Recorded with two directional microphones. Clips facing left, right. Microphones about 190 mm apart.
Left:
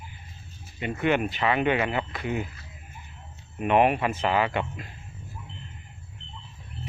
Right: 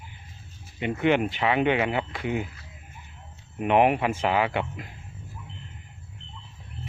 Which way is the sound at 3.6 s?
15° right (ahead or behind).